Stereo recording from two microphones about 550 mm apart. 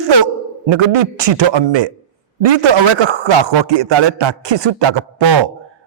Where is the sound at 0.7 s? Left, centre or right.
Right.